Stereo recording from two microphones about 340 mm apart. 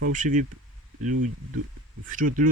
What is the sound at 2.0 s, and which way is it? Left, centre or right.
Speech, right.